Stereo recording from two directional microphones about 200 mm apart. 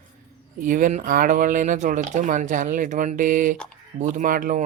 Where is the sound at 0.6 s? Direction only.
40° right (ahead or behind).